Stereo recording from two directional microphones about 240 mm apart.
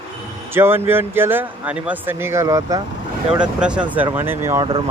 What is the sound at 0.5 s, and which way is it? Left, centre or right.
Speech, centre.